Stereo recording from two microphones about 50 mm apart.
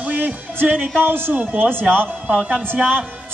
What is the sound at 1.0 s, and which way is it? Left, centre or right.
Speech, right.